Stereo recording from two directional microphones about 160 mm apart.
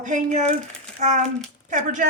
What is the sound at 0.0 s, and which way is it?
A woman's voice, 50° right (ahead or behind).